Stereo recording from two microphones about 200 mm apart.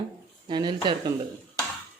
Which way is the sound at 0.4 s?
20° right (ahead or behind).